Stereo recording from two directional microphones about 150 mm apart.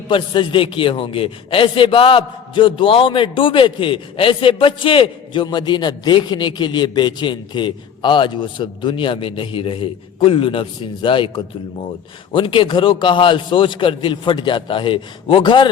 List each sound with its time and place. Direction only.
0.1 s a man's voice: 35° left (ahead or behind)